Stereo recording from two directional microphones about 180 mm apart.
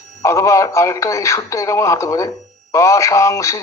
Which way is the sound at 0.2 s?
15° left (ahead or behind).